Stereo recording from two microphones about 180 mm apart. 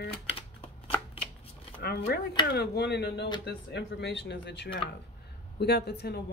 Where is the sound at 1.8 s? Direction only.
70° left (ahead or behind).